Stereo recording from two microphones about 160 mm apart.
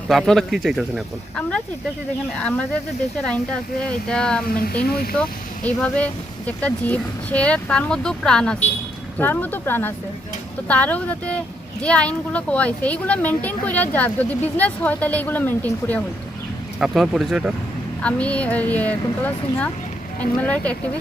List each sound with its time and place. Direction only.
0.1 s speech: centre (ahead or behind)
4.4 s speech: 65° left (ahead or behind)
5.6 s speech: 10° left (ahead or behind)
16.8 s speech: 5° right (ahead or behind)
18.0 s speech: 10° left (ahead or behind)